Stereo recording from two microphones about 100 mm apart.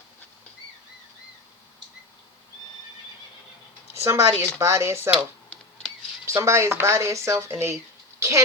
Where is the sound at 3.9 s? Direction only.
25° right (ahead or behind).